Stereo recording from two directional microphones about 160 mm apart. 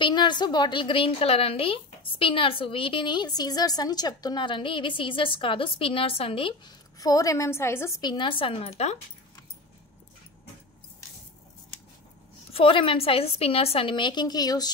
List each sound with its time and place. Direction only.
0.0 s a woman's voice: 30° left (ahead or behind)
7.0 s a woman's voice: 20° left (ahead or behind)
8.0 s a woman's voice: 30° left (ahead or behind)
12.5 s a woman's voice: 35° left (ahead or behind)